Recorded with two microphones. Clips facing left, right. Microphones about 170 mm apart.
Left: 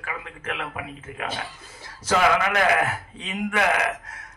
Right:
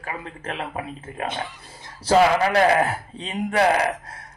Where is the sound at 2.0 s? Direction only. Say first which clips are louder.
Right 4 dB; 35° right (ahead or behind).